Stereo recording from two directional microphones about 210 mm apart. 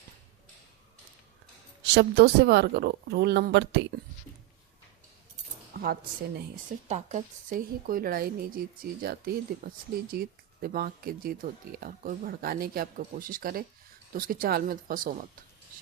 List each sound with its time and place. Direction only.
1.9 s speech: 55° right (ahead or behind)
5.7 s a woman's voice: 45° right (ahead or behind)